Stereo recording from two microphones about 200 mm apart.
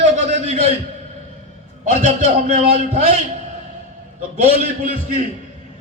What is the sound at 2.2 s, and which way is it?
Speech, 35° right (ahead or behind).